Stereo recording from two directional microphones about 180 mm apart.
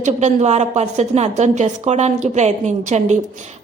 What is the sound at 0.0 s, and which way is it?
A woman's voice, 40° right (ahead or behind).